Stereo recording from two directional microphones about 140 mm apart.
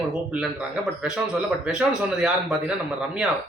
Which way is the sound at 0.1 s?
5° right (ahead or behind).